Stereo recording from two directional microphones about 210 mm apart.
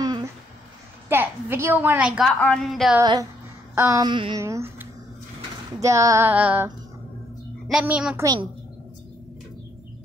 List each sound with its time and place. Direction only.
1.0 s a woman's voice: 10° right (ahead or behind)
3.0 s a woman's voice: 20° right (ahead or behind)